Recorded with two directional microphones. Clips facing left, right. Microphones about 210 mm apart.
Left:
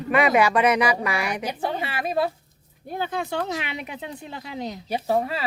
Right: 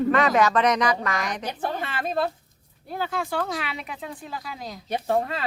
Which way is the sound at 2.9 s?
20° left (ahead or behind).